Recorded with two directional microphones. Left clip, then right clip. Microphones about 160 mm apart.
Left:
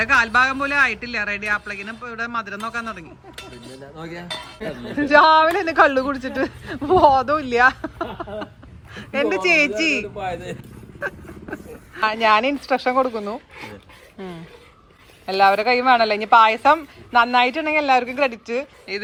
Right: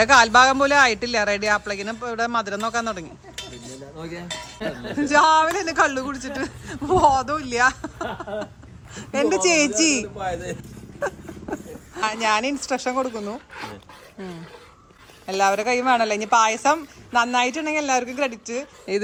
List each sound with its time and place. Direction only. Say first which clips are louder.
0.0 s a man's voice: right 3 dB; 10° right (ahead or behind)
9.0 s speech: even; 15° right (ahead or behind)
10.2 s speech: even; 30° left (ahead or behind)
11.0 s a sound: right 1 dB; 20° right (ahead or behind)
11.9 s a man's voice: left 5 dB; 5° right (ahead or behind)